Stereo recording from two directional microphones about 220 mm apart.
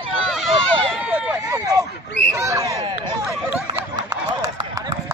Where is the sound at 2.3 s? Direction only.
15° right (ahead or behind).